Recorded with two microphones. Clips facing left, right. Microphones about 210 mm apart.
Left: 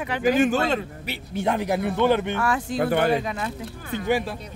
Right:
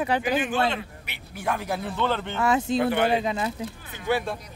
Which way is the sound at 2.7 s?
45° left (ahead or behind).